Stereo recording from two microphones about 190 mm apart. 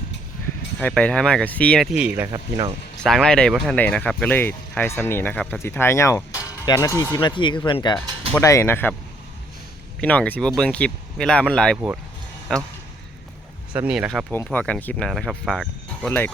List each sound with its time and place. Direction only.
0.8 s speech: 5° left (ahead or behind)
2.3 s speech: 25° right (ahead or behind)
3.0 s speech: centre (ahead or behind)
10.0 s speech: 5° left (ahead or behind)
13.7 s speech: 5° right (ahead or behind)
14.3 s speech: 10° left (ahead or behind)